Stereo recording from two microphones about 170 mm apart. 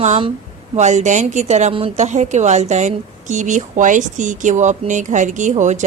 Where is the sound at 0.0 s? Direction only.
40° right (ahead or behind).